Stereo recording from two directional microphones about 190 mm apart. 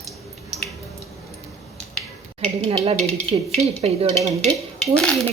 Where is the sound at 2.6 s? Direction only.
30° right (ahead or behind).